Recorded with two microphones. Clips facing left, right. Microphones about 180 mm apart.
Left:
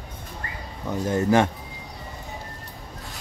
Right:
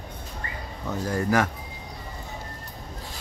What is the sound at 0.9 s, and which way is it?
Speech, 25° left (ahead or behind).